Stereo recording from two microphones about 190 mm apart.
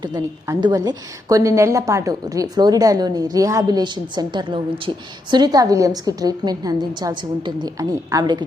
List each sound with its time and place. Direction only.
0.0 s a woman's voice: 20° right (ahead or behind)